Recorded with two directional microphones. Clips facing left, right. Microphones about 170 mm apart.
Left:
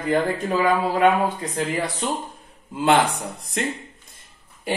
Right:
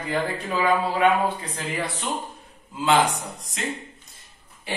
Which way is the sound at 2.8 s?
55° left (ahead or behind).